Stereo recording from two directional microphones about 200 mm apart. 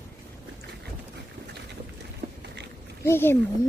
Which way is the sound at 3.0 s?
10° left (ahead or behind).